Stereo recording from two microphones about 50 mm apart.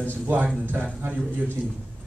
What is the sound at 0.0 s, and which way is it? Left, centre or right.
Speech, right.